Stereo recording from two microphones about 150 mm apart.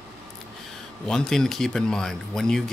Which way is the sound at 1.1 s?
5° left (ahead or behind).